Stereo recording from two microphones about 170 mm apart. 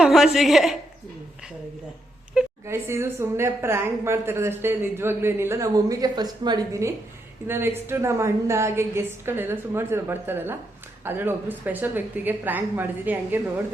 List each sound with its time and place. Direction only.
0.0 s a woman's voice: centre (ahead or behind)
2.6 s a woman's voice: 15° right (ahead or behind)